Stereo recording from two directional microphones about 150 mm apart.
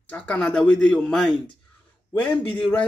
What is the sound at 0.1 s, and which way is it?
Speech, 10° left (ahead or behind).